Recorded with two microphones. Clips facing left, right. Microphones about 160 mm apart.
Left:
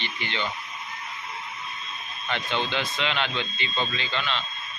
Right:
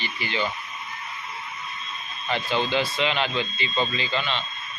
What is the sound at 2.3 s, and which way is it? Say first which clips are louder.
Speech: right 3 dB; 5° right (ahead or behind).